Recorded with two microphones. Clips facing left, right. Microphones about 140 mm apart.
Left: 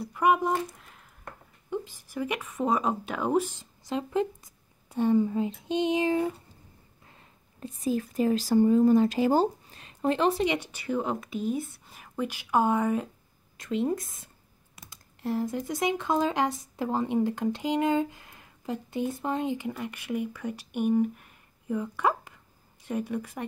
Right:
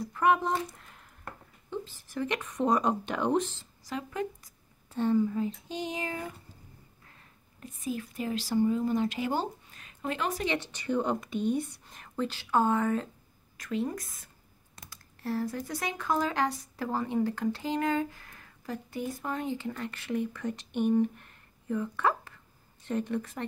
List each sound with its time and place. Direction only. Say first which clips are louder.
0.0 s speech: left 2 dB; 10° left (ahead or behind)
0.7 s a sound: left 1 dB; centre (ahead or behind)
1.7 s speech: left 4 dB; 10° left (ahead or behind)
3.8 s a sound: left 6 dB; 25° left (ahead or behind)
5.2 s a woman's voice: left 2 dB; 25° left (ahead or behind)
7.6 s speech: left 6 dB; 35° left (ahead or behind)
10.4 s a woman's voice: left 4 dB; 15° left (ahead or behind)